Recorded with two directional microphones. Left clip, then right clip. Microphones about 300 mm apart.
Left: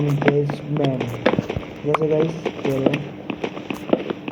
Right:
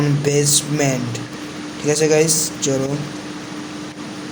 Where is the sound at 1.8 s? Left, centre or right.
Right.